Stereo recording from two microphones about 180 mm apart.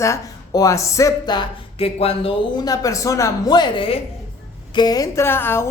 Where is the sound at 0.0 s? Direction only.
20° left (ahead or behind).